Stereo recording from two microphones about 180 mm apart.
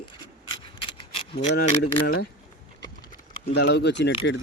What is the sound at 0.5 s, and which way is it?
Rub, 30° left (ahead or behind).